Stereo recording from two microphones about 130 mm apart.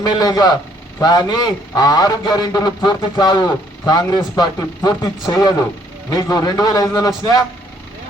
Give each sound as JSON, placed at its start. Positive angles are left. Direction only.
{"t": 0.0, "sound": "a man's voice", "side_deg": 30}